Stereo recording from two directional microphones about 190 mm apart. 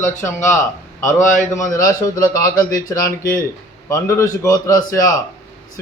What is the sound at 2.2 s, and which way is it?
A man's voice, 15° left (ahead or behind).